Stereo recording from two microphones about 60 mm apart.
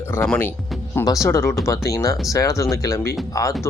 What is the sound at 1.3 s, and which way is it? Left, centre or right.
Speech, left.